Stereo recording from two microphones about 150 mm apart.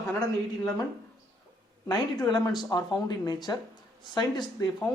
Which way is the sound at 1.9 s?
25° left (ahead or behind).